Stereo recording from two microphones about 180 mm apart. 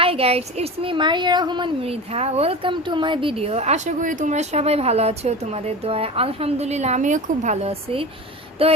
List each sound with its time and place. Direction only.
0.0 s a woman's voice: 30° right (ahead or behind)